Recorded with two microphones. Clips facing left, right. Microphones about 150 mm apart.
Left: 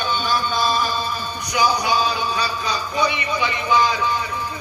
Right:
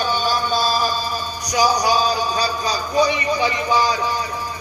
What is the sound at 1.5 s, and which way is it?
A man's voice, 35° right (ahead or behind).